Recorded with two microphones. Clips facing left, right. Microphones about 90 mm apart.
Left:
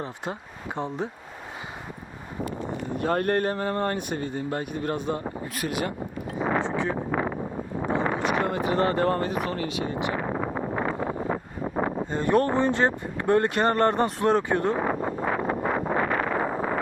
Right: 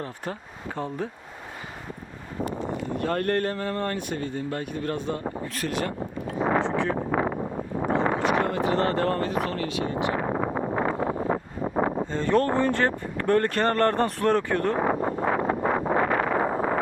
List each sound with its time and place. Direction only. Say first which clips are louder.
0.8 s speech: left 1 dB; 20° left (ahead or behind)
2.9 s speech: left 2 dB; 20° left (ahead or behind)
6.4 s a sound: right 2 dB; 40° right (ahead or behind)
6.7 s speech: right 2 dB; 5° left (ahead or behind)
7.1 s wind noise: right 2 dB; 45° right (ahead or behind)
7.9 s a sound: right 2 dB; 65° right (ahead or behind)
8.2 s a sound: right 2 dB; 20° right (ahead or behind)
8.4 s speech: even; 15° left (ahead or behind)
10.2 s a sound: right 2 dB; 40° right (ahead or behind)
10.8 s vehicle: right 2 dB; 40° right (ahead or behind)
11.3 s wind noise: right 2 dB; 35° right (ahead or behind)
12.1 s speech: left 1 dB; 15° left (ahead or behind)
14.8 s wind noise: right 2 dB; 40° right (ahead or behind)